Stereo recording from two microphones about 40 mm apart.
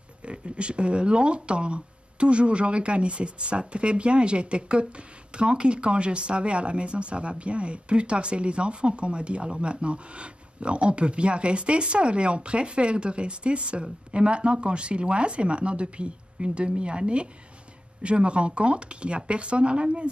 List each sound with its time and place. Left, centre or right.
0.2 s speech: right